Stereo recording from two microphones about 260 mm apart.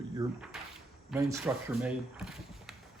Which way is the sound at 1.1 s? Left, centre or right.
Centre.